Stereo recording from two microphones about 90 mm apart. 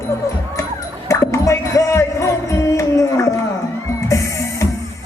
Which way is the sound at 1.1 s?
35° left (ahead or behind).